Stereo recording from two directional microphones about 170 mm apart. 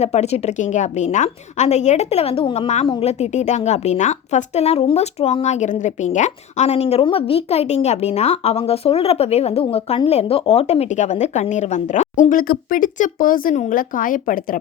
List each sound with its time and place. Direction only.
0.0 s a woman's voice: 40° left (ahead or behind)